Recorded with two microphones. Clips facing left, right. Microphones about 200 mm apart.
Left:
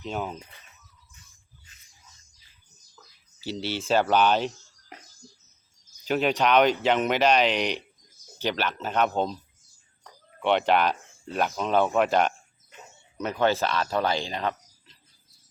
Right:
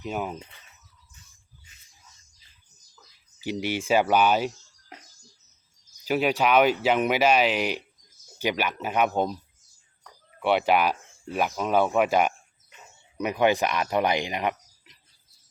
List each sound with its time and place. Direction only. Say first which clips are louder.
0.0 s speech: right 1 dB; 5° right (ahead or behind)
3.4 s speech: right 2 dB; 15° right (ahead or behind)
6.1 s speech: even; 5° right (ahead or behind)
10.4 s speech: even; 10° right (ahead or behind)